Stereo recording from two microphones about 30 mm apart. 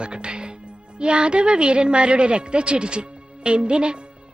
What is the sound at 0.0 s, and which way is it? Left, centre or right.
Speech, right.